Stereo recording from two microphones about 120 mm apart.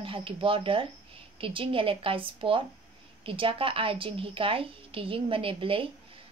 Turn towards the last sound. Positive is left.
turn(degrees=-50)  # may be behind; listen again after turning